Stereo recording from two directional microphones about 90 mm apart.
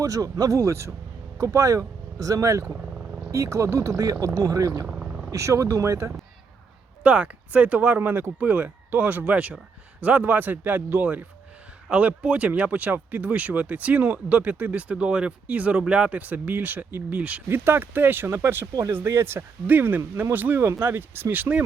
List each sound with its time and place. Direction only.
0.0 s speech: 40° right (ahead or behind)
2.9 s purr: 10° right (ahead or behind)
3.3 s speech: 35° right (ahead or behind)
4.9 s vehicle: 10° right (ahead or behind)
5.3 s speech: 35° right (ahead or behind)
7.0 s speech: 15° right (ahead or behind)